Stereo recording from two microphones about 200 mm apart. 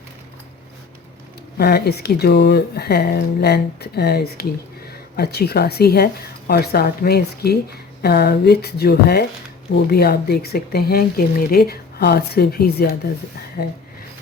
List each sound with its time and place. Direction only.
1.5 s speech: 50° left (ahead or behind)